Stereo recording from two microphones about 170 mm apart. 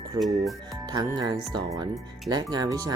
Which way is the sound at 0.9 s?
25° right (ahead or behind).